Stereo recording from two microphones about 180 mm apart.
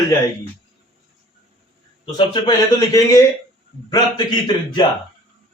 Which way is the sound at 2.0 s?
25° left (ahead or behind).